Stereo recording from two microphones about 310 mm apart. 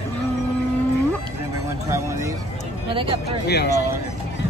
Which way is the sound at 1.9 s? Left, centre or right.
Centre.